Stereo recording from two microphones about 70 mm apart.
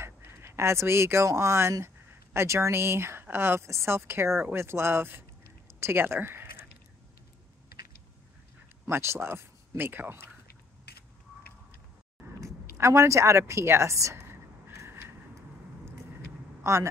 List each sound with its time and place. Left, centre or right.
0.0 s speech: right
8.8 s speech: right
12.4 s a woman's voice: right
14.8 s vehicle: right
16.6 s a man's voice: right